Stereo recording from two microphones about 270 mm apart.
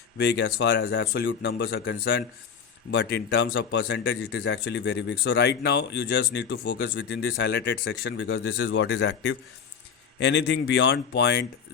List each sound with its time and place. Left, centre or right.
0.2 s speech: left